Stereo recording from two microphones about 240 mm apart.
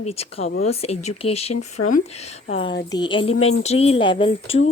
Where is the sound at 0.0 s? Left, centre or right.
Left.